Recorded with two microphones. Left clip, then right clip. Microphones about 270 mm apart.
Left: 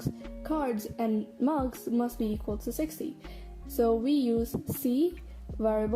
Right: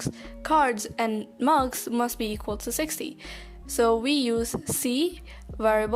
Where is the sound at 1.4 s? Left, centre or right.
Right.